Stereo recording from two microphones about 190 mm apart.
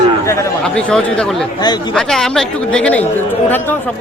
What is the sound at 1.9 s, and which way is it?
Speech, centre (ahead or behind).